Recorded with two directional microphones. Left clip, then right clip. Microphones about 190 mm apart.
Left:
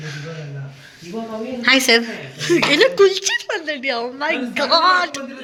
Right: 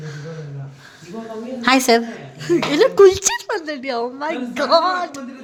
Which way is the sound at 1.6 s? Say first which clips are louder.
Left 1 dB; 30° right (ahead or behind).